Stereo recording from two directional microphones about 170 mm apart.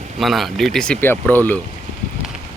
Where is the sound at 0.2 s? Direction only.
Centre (ahead or behind).